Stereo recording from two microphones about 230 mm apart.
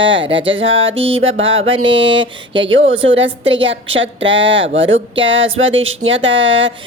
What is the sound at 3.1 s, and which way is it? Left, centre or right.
A woman's voice, right.